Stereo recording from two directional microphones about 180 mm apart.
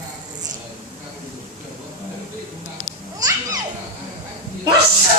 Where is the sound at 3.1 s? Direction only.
20° right (ahead or behind).